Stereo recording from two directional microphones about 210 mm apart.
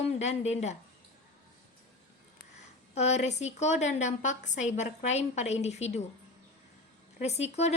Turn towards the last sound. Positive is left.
turn(degrees=30)  # may be behind; listen again after turning